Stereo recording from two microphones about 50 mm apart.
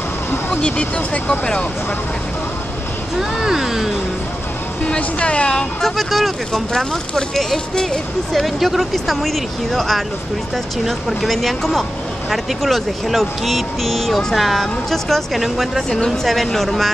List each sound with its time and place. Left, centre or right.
0.6 s speech: left
3.2 s speech: centre
4.8 s speech: left
5.8 s speech: centre